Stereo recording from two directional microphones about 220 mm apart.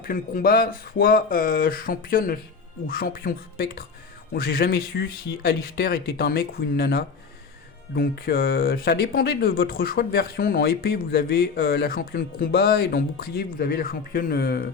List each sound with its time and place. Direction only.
0.0 s speech: 40° left (ahead or behind)